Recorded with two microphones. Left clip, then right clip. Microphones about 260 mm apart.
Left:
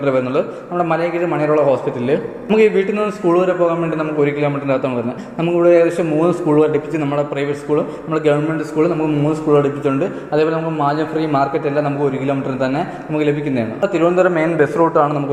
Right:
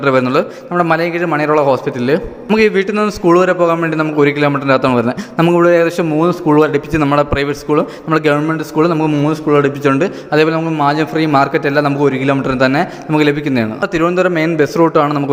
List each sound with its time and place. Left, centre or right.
0.0 s a man's voice: right